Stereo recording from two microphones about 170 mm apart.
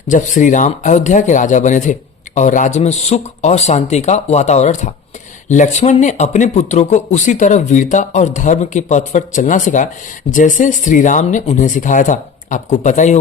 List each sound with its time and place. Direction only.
0.1 s speech: 50° left (ahead or behind)